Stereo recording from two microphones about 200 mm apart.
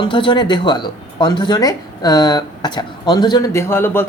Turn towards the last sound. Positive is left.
turn(degrees=10)  # may be behind; listen again after turning